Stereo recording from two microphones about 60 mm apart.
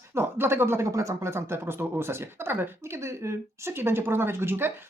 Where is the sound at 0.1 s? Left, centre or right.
Right.